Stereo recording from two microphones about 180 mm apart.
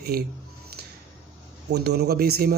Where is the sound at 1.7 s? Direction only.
65° right (ahead or behind).